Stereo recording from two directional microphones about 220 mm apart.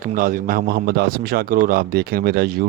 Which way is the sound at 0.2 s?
40° right (ahead or behind).